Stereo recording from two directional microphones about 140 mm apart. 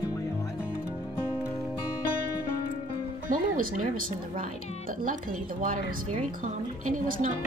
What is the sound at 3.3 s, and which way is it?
Speech, 75° right (ahead or behind).